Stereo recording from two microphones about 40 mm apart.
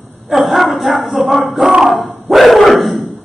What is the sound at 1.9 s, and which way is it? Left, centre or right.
Dog, centre.